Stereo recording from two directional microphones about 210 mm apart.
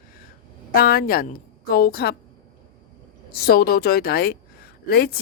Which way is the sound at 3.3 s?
45° left (ahead or behind).